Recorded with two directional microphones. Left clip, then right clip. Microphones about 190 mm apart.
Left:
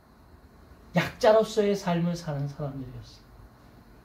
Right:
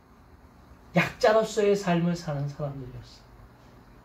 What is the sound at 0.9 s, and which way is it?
Speech, 40° left (ahead or behind).